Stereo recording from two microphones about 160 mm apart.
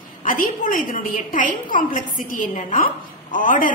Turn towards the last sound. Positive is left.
turn(degrees=55)  # may be behind; listen again after turning